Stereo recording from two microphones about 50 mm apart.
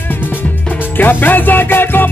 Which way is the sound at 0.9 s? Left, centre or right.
Left.